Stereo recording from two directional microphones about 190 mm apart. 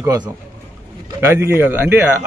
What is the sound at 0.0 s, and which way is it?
Speech, 20° right (ahead or behind).